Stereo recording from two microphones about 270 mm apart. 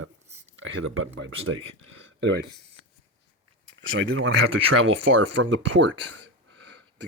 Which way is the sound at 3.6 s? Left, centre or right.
Right.